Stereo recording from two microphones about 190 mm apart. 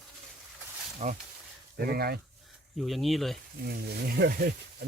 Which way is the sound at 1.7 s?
55° right (ahead or behind).